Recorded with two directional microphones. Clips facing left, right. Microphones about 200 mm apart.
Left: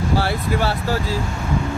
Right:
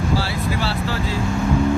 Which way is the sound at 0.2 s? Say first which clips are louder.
Left 3 dB; 50° left (ahead or behind).